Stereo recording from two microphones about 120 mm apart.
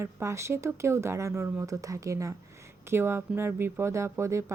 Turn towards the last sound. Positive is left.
turn(degrees=-25)  # may be behind; listen again after turning